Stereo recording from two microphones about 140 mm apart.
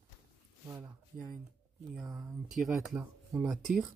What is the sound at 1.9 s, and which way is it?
Speech, centre (ahead or behind).